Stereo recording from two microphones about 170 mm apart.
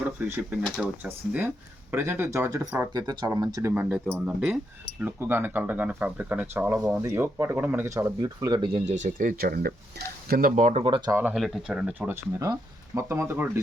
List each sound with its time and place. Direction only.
0.3 s speech: 15° right (ahead or behind)
2.9 s speech: 25° right (ahead or behind)
3.8 s speech: 5° right (ahead or behind); by 8.8 s 25° right (ahead or behind)
8.9 s speech: 45° right (ahead or behind)
10.5 s speech: 40° right (ahead or behind)
10.8 s speech: 30° right (ahead or behind)
11.1 s speech: 10° right (ahead or behind)